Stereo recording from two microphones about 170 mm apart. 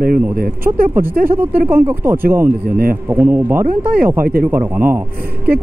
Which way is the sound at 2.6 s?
55° right (ahead or behind).